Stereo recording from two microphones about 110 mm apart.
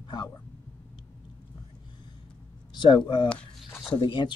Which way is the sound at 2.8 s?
45° left (ahead or behind).